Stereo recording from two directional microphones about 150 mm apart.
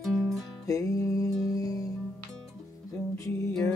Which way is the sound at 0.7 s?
20° left (ahead or behind).